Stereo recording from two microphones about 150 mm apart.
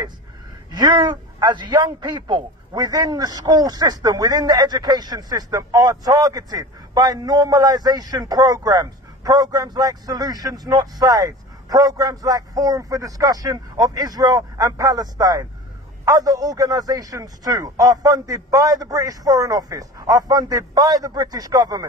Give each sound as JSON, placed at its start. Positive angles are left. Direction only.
{"t": 0.7, "sound": "a man's voice", "side_deg": -30}